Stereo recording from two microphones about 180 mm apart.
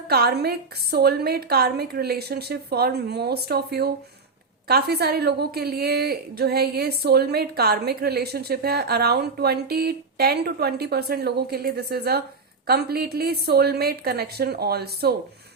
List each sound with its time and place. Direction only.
0.1 s a woman's voice: 60° right (ahead or behind)